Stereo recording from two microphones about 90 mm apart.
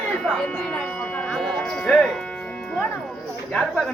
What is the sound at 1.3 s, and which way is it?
Music, 5° left (ahead or behind).